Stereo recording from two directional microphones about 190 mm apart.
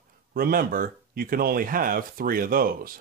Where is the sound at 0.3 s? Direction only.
50° right (ahead or behind).